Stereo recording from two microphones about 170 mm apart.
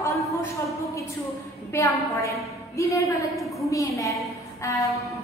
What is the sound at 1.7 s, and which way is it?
A woman's voice, 20° left (ahead or behind).